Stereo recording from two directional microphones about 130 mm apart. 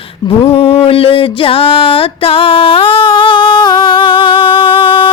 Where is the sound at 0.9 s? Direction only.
45° left (ahead or behind).